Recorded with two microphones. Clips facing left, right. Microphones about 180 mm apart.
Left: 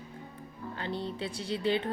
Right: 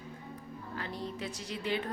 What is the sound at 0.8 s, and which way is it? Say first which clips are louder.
Speech: left 4 dB; 30° left (ahead or behind).